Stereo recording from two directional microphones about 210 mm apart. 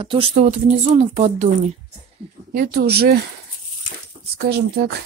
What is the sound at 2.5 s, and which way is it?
Speech, 45° right (ahead or behind).